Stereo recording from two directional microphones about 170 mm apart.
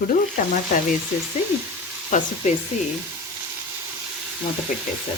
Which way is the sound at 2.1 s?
45° left (ahead or behind).